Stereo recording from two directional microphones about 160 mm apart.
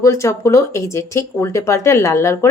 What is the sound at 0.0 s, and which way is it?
Speech, 20° left (ahead or behind).